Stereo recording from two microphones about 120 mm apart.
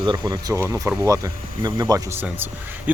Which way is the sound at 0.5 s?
25° right (ahead or behind).